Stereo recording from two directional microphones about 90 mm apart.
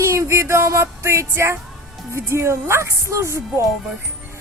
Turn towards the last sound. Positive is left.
turn(degrees=-30)  # may be behind; listen again after turning